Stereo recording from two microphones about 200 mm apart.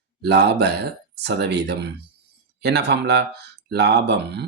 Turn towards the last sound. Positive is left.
turn(degrees=-60)  # may be behind; listen again after turning